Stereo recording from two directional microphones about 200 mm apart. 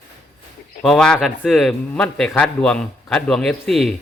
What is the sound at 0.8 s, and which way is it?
A man's voice, 5° left (ahead or behind).